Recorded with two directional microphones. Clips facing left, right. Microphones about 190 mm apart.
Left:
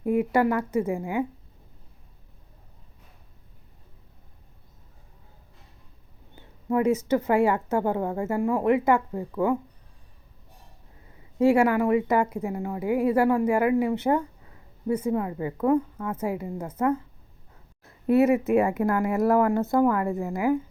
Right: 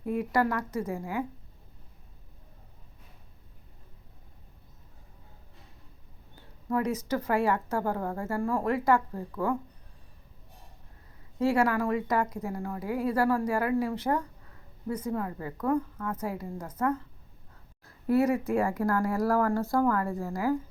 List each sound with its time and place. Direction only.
0.0 s speech: 25° left (ahead or behind)
6.3 s speech: 20° left (ahead or behind)
11.3 s speech: 25° left (ahead or behind)